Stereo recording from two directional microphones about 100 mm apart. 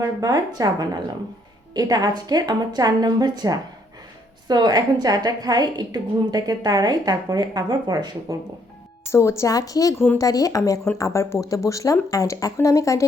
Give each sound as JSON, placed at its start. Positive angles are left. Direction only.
{"t": 0.0, "sound": "a woman's voice", "side_deg": -35}
{"t": 9.0, "sound": "a woman's voice", "side_deg": 30}